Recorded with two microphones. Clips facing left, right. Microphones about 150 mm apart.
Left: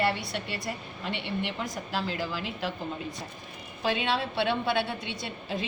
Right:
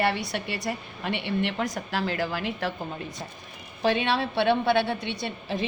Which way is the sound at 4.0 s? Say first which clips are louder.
Right 3 dB; 65° right (ahead or behind).